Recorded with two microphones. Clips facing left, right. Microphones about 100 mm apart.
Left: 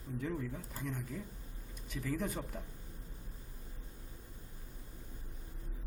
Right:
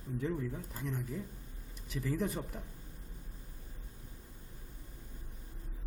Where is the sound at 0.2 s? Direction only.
5° right (ahead or behind).